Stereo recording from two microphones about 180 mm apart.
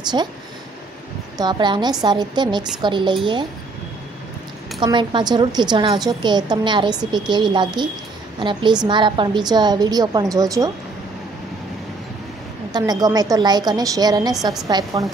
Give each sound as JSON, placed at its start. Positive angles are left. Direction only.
{"t": 0.1, "sound": "a woman's voice", "side_deg": -25}
{"t": 1.4, "sound": "a woman's voice", "side_deg": -25}
{"t": 4.7, "sound": "a woman's voice", "side_deg": -25}
{"t": 12.7, "sound": "a woman's voice", "side_deg": -20}